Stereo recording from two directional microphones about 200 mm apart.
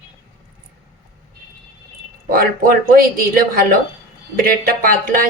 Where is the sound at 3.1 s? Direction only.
45° right (ahead or behind).